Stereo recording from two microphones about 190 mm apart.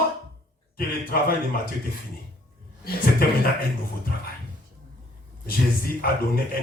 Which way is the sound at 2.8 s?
50° left (ahead or behind).